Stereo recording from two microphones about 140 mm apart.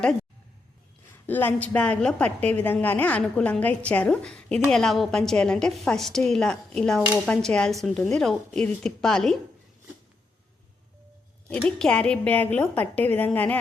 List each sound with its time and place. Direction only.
1.3 s a woman's voice: 15° left (ahead or behind)
11.4 s a woman's voice: 5° left (ahead or behind)